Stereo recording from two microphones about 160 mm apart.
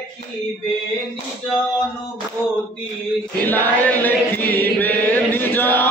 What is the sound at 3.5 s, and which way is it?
Chant, 10° left (ahead or behind).